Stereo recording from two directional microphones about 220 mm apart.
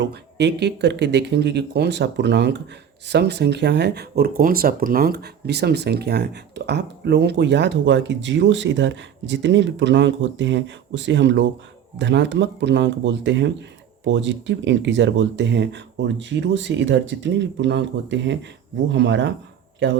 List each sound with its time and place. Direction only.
0.0 s speech: 50° right (ahead or behind)